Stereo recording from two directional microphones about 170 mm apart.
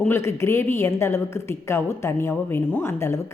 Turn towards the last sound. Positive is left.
turn(degrees=15)  # may be behind; listen again after turning